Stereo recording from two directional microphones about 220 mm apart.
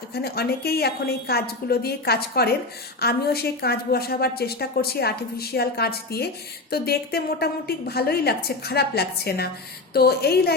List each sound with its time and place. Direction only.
0.1 s a woman's voice: 45° left (ahead or behind)